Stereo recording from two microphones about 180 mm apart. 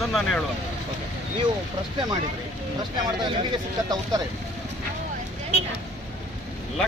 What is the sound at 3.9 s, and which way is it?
Speech, 20° right (ahead or behind).